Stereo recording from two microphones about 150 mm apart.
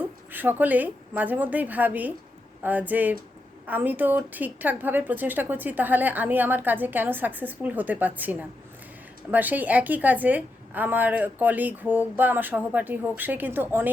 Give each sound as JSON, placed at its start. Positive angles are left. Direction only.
{"t": 0.0, "sound": "a woman's voice", "side_deg": -15}